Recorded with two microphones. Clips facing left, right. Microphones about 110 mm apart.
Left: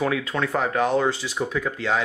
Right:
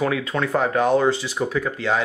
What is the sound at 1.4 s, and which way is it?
Speech, 5° right (ahead or behind).